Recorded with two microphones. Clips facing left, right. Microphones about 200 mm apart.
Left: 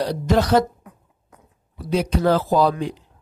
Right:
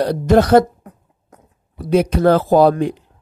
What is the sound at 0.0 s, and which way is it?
Speech, 55° right (ahead or behind).